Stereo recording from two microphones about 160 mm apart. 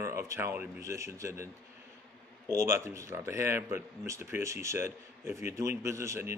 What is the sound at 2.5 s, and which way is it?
Speech, 15° right (ahead or behind).